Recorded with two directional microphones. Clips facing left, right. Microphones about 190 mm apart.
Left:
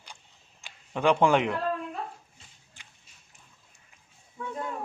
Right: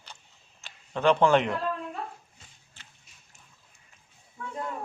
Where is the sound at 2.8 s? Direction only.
15° left (ahead or behind).